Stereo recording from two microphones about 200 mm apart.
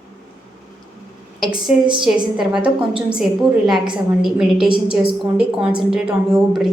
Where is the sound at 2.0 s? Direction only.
Centre (ahead or behind).